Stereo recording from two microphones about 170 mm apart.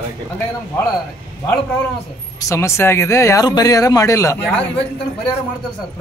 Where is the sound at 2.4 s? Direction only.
15° left (ahead or behind).